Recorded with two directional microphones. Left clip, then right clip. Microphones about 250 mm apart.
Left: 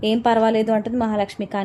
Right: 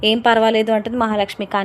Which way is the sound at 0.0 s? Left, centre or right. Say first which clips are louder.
Right 4 dB; centre.